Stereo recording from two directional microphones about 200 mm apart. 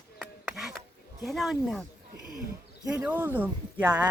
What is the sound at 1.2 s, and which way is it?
Speech, centre (ahead or behind).